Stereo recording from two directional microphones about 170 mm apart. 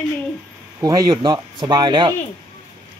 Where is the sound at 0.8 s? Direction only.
20° right (ahead or behind).